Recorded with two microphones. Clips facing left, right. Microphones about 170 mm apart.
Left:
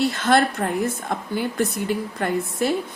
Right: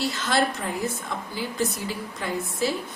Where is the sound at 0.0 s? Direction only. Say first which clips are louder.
Left 6 dB; 55° left (ahead or behind).